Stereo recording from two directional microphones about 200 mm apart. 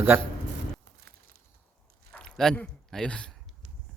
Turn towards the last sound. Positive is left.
turn(degrees=5)  # may be behind; listen again after turning